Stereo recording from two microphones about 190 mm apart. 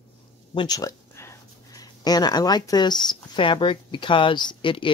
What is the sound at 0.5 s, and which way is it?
Speech, 20° left (ahead or behind).